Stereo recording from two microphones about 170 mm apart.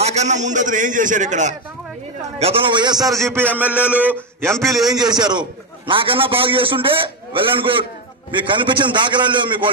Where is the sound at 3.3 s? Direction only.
10° right (ahead or behind).